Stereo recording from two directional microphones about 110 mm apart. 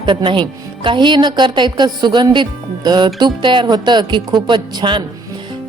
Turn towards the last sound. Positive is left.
turn(degrees=-45)  # may be behind; listen again after turning